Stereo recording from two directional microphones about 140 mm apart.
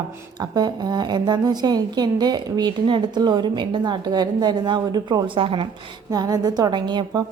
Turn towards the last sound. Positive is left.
turn(degrees=-30)  # may be behind; listen again after turning